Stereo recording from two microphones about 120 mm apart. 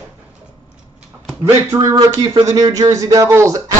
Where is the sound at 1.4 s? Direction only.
25° right (ahead or behind).